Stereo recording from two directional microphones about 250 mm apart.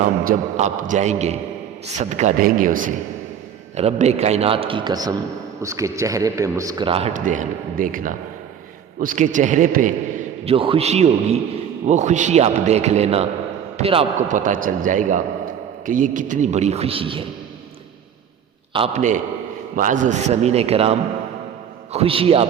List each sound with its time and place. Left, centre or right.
0.0 s a man's voice: right
18.7 s a man's voice: right